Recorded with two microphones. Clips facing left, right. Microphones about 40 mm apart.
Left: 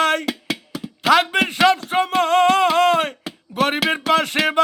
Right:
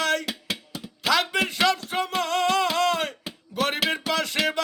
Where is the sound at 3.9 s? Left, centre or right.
Left.